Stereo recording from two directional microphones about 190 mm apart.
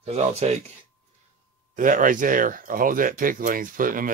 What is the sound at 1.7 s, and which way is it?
Speech, 45° right (ahead or behind).